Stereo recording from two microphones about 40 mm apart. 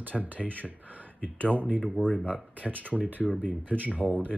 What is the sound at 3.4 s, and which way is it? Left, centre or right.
Speech, right.